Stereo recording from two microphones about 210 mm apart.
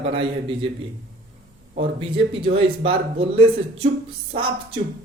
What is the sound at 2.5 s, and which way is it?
A man's voice, 25° right (ahead or behind).